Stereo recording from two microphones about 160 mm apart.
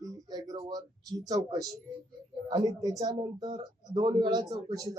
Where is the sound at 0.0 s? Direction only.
25° right (ahead or behind).